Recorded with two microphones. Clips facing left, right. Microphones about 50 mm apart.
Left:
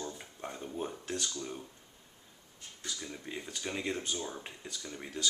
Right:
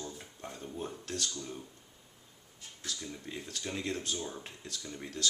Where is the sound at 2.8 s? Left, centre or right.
Centre.